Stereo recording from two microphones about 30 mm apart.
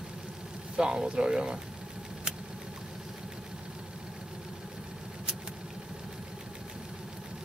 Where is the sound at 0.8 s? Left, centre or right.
Right.